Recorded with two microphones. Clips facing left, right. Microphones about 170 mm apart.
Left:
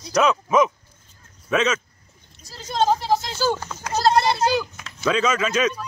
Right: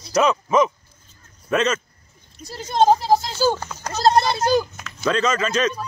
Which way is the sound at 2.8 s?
40° right (ahead or behind).